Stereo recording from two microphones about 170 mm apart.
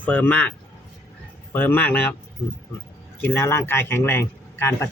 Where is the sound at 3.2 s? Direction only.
15° left (ahead or behind).